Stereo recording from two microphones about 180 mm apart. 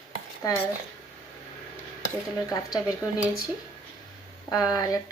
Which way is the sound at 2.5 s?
20° left (ahead or behind).